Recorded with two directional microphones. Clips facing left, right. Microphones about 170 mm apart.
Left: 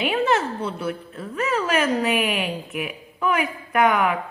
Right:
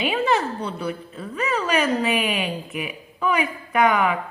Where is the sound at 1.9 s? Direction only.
Centre (ahead or behind).